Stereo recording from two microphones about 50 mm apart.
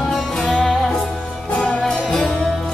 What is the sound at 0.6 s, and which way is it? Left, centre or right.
Music, centre.